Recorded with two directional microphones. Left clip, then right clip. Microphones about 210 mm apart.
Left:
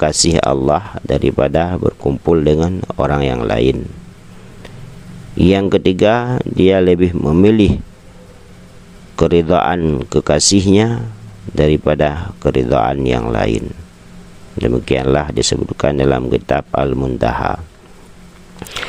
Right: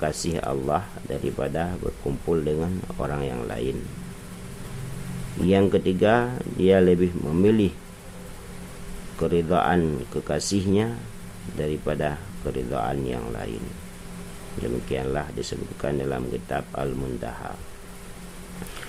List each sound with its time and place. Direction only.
0.0 s speech: 35° left (ahead or behind)
5.4 s speech: 40° left (ahead or behind)
9.1 s speech: 40° left (ahead or behind)
14.6 s speech: 40° left (ahead or behind)
18.6 s a sound: 30° left (ahead or behind)